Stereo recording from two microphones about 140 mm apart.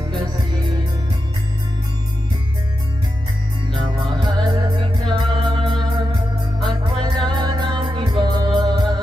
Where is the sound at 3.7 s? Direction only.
30° right (ahead or behind).